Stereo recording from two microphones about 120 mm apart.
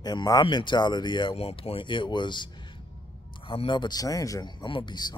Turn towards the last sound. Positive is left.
turn(degrees=35)  # may be behind; listen again after turning